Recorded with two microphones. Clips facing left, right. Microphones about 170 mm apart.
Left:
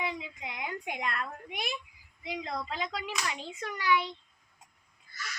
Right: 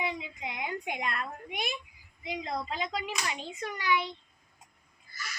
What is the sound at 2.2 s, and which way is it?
A child's voice, 20° right (ahead or behind).